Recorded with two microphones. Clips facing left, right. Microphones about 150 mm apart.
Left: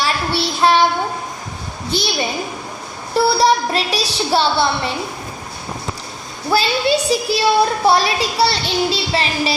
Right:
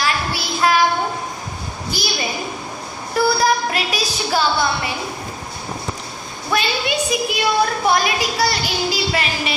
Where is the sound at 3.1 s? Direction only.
30° left (ahead or behind).